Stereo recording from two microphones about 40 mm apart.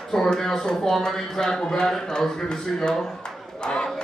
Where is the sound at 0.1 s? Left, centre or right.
Centre.